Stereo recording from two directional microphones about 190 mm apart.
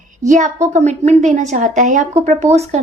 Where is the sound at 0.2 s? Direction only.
40° right (ahead or behind).